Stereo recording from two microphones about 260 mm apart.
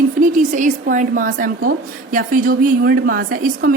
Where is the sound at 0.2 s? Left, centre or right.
Right.